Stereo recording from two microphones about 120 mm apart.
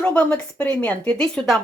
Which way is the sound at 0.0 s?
15° left (ahead or behind).